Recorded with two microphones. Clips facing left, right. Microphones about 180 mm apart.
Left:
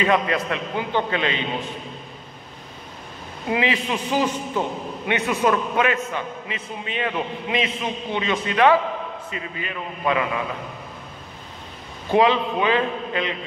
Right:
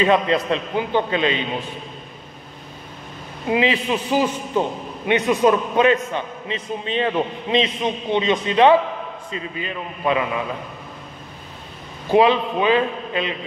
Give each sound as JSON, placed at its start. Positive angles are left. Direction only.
{"t": 0.0, "sound": "a man's voice", "side_deg": -25}
{"t": 3.4, "sound": "a man's voice", "side_deg": -25}
{"t": 3.9, "sound": "a man's voice", "side_deg": -10}
{"t": 12.1, "sound": "a man's voice", "side_deg": -20}